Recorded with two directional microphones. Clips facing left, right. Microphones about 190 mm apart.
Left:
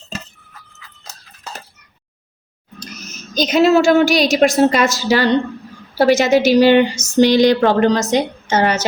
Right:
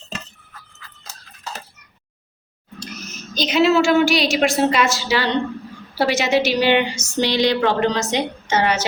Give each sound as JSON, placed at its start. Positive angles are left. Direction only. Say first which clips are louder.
{"t": 2.8, "sound": "a woman's voice", "louder": "even", "side_deg": 40}